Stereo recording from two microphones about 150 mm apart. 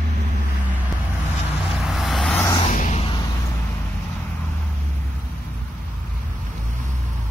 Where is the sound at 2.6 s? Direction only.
55° left (ahead or behind).